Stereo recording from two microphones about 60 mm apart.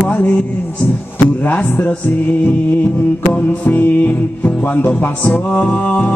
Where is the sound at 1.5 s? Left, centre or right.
Left.